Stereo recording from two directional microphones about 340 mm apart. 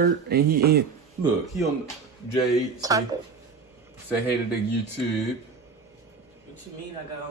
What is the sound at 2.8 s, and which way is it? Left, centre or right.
Speech, centre.